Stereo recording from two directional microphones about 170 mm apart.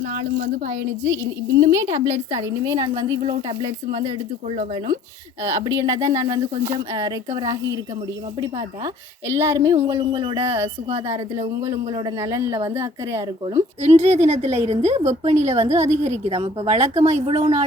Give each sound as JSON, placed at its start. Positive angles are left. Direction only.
{"t": 0.0, "sound": "a woman's voice", "side_deg": -60}
{"t": 1.0, "sound": "a woman's voice", "side_deg": -15}
{"t": 5.4, "sound": "speech", "side_deg": -20}
{"t": 10.0, "sound": "speech", "side_deg": -30}
{"t": 10.3, "sound": "a woman's voice", "side_deg": -15}
{"t": 10.8, "sound": "a woman's voice", "side_deg": -40}
{"t": 11.3, "sound": "speech", "side_deg": -20}
{"t": 12.2, "sound": "a woman's voice", "side_deg": -15}
{"t": 13.8, "sound": "a woman's voice", "side_deg": -40}